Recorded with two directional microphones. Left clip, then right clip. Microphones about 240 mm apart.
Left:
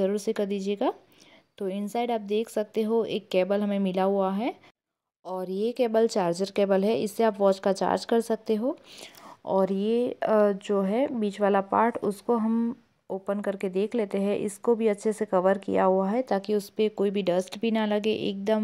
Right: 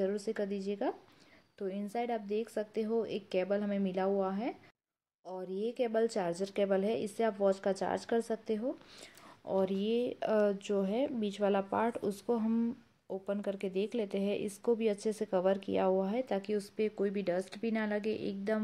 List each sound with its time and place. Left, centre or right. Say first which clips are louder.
0.0 s a woman's voice: left 8 dB; left